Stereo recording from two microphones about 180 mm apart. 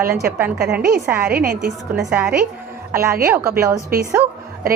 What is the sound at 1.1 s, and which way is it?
Speech, 10° right (ahead or behind).